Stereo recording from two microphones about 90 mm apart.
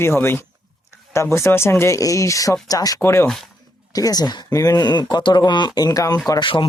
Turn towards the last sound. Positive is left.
turn(degrees=60)  # may be behind; listen again after turning